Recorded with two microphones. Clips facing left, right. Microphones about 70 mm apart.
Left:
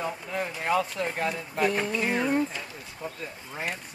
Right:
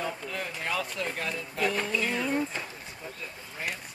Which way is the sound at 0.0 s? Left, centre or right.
Left.